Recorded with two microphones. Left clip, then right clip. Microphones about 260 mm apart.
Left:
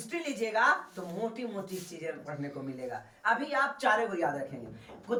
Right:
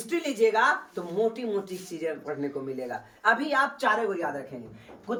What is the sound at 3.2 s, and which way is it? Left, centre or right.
Speech, right.